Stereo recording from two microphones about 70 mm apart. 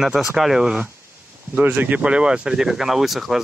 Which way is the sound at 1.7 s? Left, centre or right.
Right.